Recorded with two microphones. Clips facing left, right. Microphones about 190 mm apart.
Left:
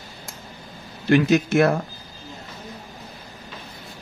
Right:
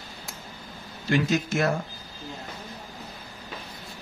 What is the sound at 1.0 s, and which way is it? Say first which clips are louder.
Speech: left 7 dB; 60° left (ahead or behind).